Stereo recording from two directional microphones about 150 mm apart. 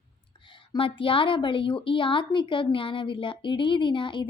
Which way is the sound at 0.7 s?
35° left (ahead or behind).